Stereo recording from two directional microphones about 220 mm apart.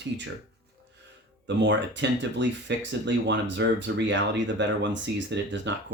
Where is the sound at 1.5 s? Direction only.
55° right (ahead or behind).